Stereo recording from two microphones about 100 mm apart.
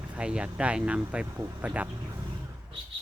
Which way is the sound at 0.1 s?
10° right (ahead or behind).